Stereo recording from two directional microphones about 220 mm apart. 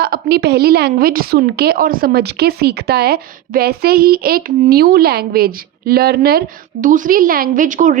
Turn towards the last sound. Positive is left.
turn(degrees=-35)  # may be behind; listen again after turning